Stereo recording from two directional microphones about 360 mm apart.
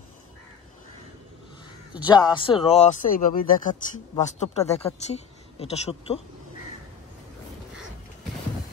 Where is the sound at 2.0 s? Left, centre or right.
Centre.